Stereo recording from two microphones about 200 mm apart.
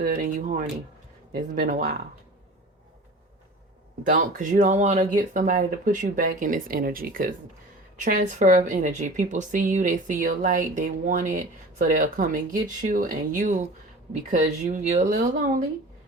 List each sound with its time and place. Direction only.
0.0 s speech: 45° right (ahead or behind)
4.1 s speech: 40° right (ahead or behind)